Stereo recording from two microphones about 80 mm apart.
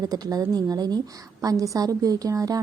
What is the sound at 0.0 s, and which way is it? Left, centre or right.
A woman's voice, right.